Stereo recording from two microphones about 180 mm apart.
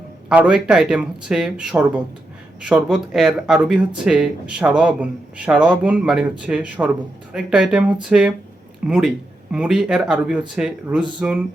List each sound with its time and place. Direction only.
0.3 s speech: 5° right (ahead or behind)